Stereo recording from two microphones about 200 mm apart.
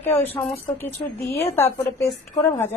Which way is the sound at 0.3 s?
30° left (ahead or behind).